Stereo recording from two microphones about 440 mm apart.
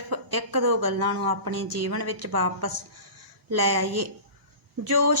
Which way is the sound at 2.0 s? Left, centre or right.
Right.